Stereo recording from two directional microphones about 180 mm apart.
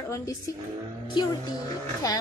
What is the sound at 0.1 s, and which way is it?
Speech, 15° left (ahead or behind).